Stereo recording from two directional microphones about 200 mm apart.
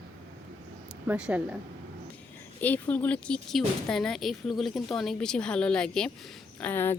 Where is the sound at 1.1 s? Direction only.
5° right (ahead or behind).